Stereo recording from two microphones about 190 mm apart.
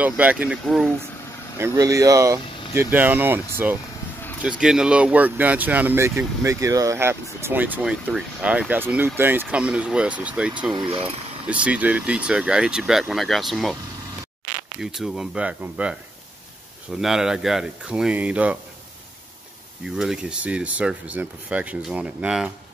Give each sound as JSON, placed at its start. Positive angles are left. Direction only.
{"t": 0.0, "sound": "speech", "side_deg": -10}
{"t": 1.6, "sound": "speech", "side_deg": -20}
{"t": 10.7, "sound": "speech", "side_deg": -25}
{"t": 11.6, "sound": "speech", "side_deg": -5}
{"t": 14.8, "sound": "speech", "side_deg": 0}
{"t": 20.0, "sound": "speech", "side_deg": -5}